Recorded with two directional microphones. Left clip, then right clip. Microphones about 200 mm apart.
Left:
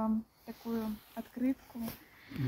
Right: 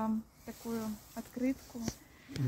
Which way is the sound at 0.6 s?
40° right (ahead or behind).